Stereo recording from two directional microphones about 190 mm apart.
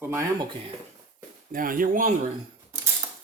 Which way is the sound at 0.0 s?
10° right (ahead or behind).